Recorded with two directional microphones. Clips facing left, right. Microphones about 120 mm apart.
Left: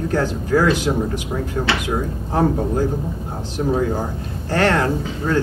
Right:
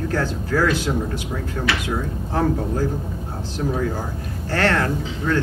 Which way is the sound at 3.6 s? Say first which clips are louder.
Left 4 dB; 15° left (ahead or behind).